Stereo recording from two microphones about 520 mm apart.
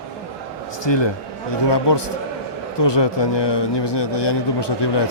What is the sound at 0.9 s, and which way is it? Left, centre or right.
A man's voice, left.